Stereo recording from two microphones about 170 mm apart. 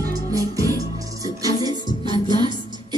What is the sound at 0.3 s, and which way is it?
Music, 20° right (ahead or behind).